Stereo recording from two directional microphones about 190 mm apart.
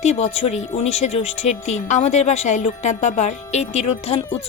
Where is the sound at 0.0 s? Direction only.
35° left (ahead or behind).